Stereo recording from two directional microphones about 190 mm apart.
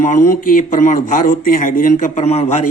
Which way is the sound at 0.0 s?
40° left (ahead or behind).